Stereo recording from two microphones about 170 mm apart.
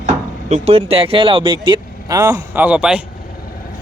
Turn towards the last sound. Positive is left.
turn(degrees=-5)  # may be behind; listen again after turning